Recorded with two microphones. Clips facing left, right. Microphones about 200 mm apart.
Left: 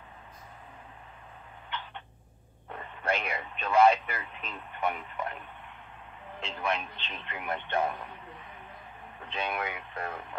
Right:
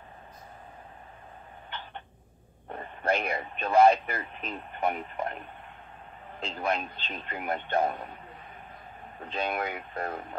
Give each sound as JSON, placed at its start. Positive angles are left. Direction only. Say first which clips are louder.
{"t": 2.7, "sound": "speech", "louder": "right 3 dB", "side_deg": -40}
{"t": 6.4, "sound": "a man's voice", "louder": "right 2 dB", "side_deg": -40}
{"t": 9.2, "sound": "a man's voice", "louder": "right 3 dB", "side_deg": -40}